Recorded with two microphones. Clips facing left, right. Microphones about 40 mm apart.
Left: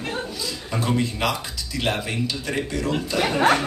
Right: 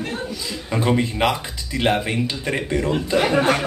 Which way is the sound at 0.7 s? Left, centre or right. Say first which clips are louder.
Right 4 dB; right.